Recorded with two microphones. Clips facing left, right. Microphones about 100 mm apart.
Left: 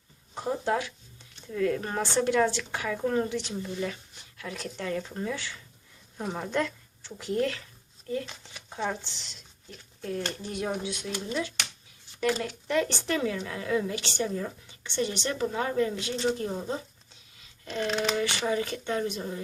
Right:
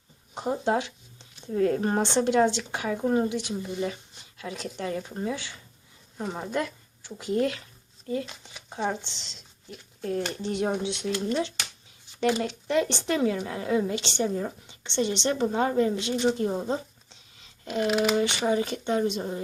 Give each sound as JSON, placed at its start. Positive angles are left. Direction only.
{"t": 0.3, "sound": "a sound", "side_deg": -20}
{"t": 1.5, "sound": "speech", "side_deg": -35}
{"t": 2.0, "sound": "speech", "side_deg": -20}
{"t": 6.1, "sound": "a woman's voice", "side_deg": -5}
{"t": 10.0, "sound": "speech", "side_deg": -35}
{"t": 12.2, "sound": "speech", "side_deg": -20}
{"t": 17.7, "sound": "a sound", "side_deg": -10}
{"t": 18.1, "sound": "speech", "side_deg": -25}